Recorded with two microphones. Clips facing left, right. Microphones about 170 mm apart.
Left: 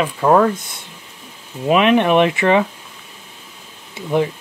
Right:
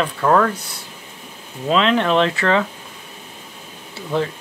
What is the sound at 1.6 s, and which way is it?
Speech, 15° left (ahead or behind).